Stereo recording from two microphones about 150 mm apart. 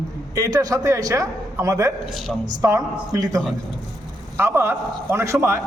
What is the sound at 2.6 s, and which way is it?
A man's voice, 20° right (ahead or behind).